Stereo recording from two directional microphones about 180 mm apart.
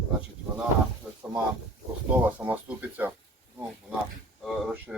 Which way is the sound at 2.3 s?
10° right (ahead or behind).